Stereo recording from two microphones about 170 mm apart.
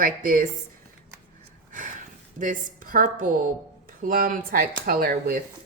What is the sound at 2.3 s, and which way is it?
A woman's voice, 55° right (ahead or behind).